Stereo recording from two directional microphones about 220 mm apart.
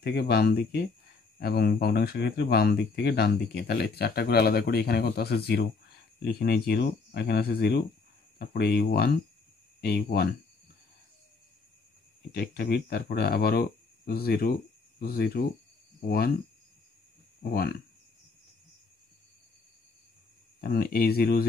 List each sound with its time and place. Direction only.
0.0 s speech: 45° left (ahead or behind)
12.3 s speech: 45° left (ahead or behind)
17.4 s speech: 40° left (ahead or behind)
20.6 s speech: 45° left (ahead or behind)